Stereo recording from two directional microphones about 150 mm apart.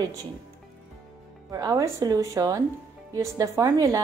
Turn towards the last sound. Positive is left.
turn(degrees=-25)  # may be behind; listen again after turning